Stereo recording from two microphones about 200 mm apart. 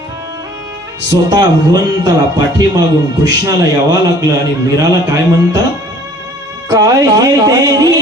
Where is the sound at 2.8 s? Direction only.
20° right (ahead or behind).